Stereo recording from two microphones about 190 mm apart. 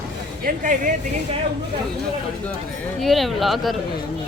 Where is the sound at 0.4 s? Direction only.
45° right (ahead or behind).